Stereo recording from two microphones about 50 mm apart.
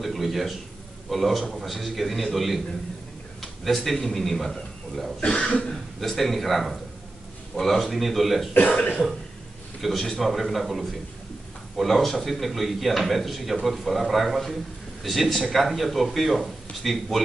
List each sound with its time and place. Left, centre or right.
0.0 s a sound: centre
1.1 s a man's voice: centre
5.2 s cough: centre
5.9 s a man's voice: centre
9.8 s a man's voice: centre